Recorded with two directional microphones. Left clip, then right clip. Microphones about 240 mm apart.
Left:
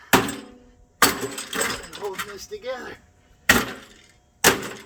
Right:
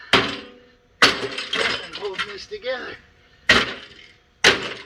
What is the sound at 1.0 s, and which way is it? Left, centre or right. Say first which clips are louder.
Vehicle: right 3 dB; centre.